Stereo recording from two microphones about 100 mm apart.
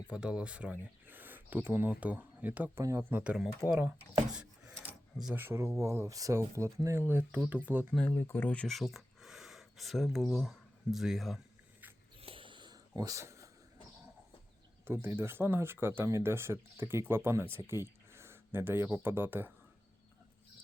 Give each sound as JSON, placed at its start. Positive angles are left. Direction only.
{"t": 0.1, "sound": "speech", "side_deg": -10}
{"t": 2.8, "sound": "speech", "side_deg": -30}
{"t": 3.1, "sound": "speech", "side_deg": -15}
{"t": 4.3, "sound": "a sound", "side_deg": -10}
{"t": 5.3, "sound": "speech", "side_deg": -25}
{"t": 8.1, "sound": "speech", "side_deg": 25}
{"t": 8.6, "sound": "speech", "side_deg": 0}
{"t": 12.2, "sound": "a sound", "side_deg": -60}
{"t": 13.0, "sound": "speech", "side_deg": -35}
{"t": 14.8, "sound": "speech", "side_deg": -25}